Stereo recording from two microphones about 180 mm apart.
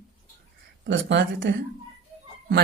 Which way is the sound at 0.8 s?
80° right.